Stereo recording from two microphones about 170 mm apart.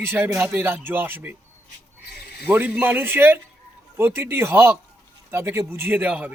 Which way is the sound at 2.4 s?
10° right (ahead or behind).